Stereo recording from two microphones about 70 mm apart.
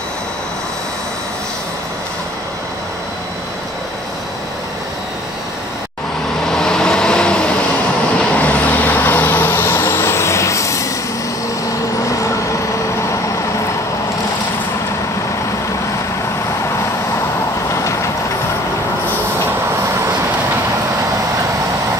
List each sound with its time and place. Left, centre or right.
6.4 s vehicle: centre; by 10.9 s left